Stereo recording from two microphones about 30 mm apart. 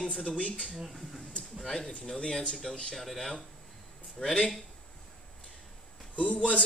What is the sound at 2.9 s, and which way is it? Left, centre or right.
Speech, centre.